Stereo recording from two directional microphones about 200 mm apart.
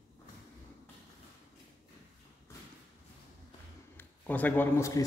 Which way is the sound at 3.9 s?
10° left (ahead or behind).